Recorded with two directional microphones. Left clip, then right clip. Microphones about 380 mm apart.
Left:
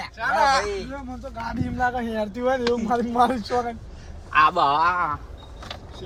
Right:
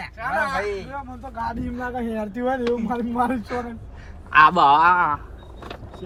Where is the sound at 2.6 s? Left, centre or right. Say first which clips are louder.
Left 1 dB; left.